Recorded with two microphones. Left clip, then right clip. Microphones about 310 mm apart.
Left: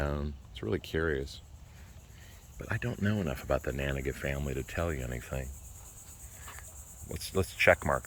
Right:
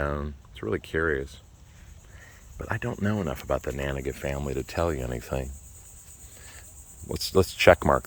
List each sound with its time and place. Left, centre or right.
0.0 s speech: centre
2.6 s speech: centre
7.6 s speech: right